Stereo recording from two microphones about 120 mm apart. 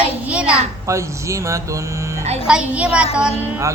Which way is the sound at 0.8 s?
25° right (ahead or behind).